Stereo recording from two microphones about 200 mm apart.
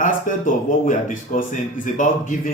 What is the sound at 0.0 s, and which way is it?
A man's voice, 40° left (ahead or behind).